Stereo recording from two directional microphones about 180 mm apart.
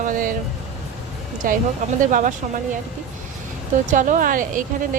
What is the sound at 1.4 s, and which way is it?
Speech, 50° right (ahead or behind).